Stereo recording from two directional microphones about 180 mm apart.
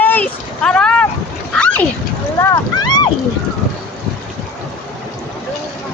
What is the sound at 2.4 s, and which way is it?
Boat, 20° left (ahead or behind).